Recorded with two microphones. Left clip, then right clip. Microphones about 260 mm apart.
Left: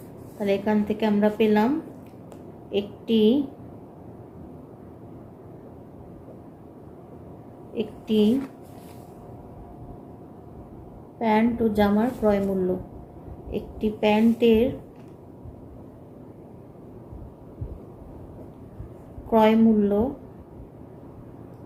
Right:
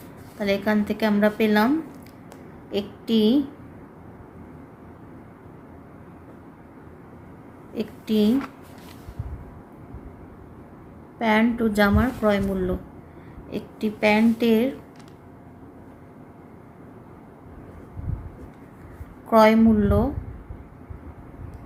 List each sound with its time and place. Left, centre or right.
0.3 s a woman's voice: right
2.7 s a woman's voice: right
7.8 s a sound: right
11.2 s a woman's voice: right
14.0 s a woman's voice: right
19.3 s a woman's voice: right